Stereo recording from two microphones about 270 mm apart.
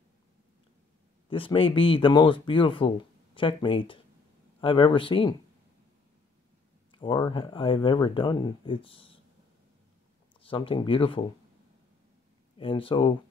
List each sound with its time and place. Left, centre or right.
1.3 s speech: centre
6.9 s speech: centre
10.4 s speech: centre
12.5 s speech: centre